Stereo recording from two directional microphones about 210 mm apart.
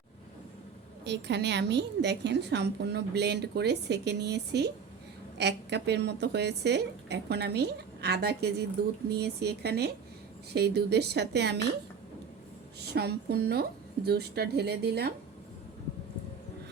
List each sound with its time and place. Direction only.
1.0 s a woman's voice: 55° right (ahead or behind)
12.9 s a woman's voice: 50° right (ahead or behind)